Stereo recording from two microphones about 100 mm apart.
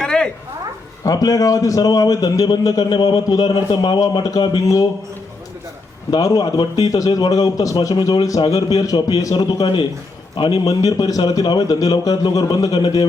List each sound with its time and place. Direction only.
0.0 s a sound: 5° left (ahead or behind)
1.0 s a man's voice: 40° left (ahead or behind)
6.1 s a man's voice: 40° left (ahead or behind)